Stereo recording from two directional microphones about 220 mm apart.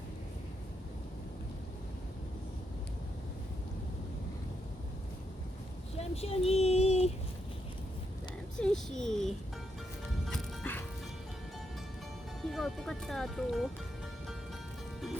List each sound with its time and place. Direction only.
6.0 s speech: 25° left (ahead or behind)
8.5 s speech: 5° left (ahead or behind)
10.2 s music: 5° left (ahead or behind)
12.5 s speech: centre (ahead or behind)